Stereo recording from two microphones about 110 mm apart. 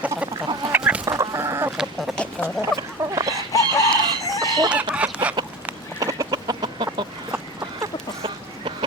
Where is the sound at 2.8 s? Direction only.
35° right (ahead or behind).